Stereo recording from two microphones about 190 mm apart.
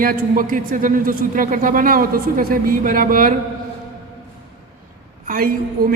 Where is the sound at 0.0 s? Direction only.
50° right (ahead or behind).